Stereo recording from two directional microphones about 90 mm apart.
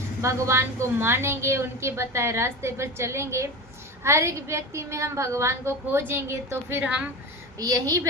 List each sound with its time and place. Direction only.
0.2 s a woman's voice: 30° right (ahead or behind)
6.8 s a woman's voice: 15° right (ahead or behind)
7.6 s a woman's voice: 40° right (ahead or behind)